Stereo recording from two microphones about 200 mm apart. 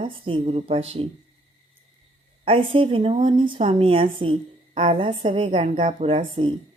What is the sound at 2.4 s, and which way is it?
Speech, 25° right (ahead or behind).